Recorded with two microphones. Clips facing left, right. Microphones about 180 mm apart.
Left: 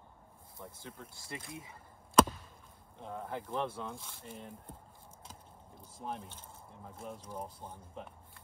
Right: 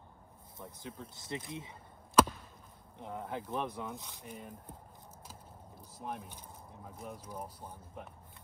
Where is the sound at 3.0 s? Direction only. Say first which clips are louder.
Even; 10° right (ahead or behind).